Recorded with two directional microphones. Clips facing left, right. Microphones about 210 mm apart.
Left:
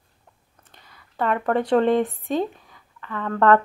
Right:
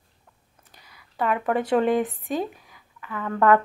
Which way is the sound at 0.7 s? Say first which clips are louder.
Left 2 dB; 5° right (ahead or behind).